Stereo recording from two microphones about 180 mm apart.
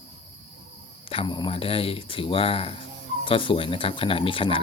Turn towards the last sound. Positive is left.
turn(degrees=30)  # may be behind; listen again after turning